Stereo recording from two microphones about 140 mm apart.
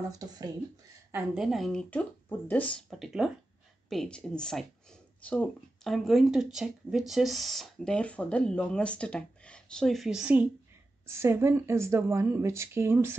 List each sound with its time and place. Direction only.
1.3 s speech: centre (ahead or behind)
11.1 s speech: 20° right (ahead or behind)